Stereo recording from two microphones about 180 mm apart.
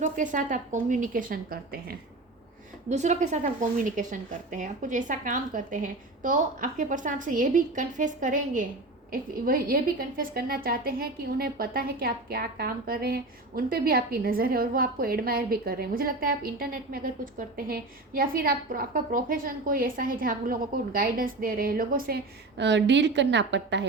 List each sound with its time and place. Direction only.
0.0 s a woman's voice: 45° right (ahead or behind)
2.9 s a woman's voice: 40° right (ahead or behind); by 23.8 s 80° right